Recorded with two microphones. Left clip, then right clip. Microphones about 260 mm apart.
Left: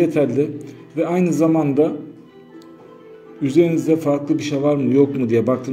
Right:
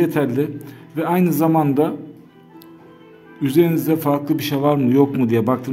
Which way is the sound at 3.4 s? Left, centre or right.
Right.